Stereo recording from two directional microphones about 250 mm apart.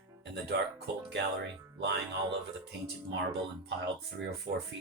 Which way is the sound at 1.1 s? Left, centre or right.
Right.